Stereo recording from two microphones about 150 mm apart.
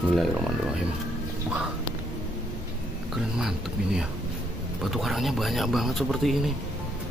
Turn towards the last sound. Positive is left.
turn(degrees=0)  # may be behind; listen again after turning